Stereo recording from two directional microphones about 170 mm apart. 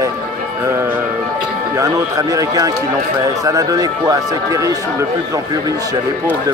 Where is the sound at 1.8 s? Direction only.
20° right (ahead or behind).